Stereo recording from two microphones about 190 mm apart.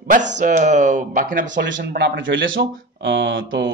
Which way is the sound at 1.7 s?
60° right (ahead or behind).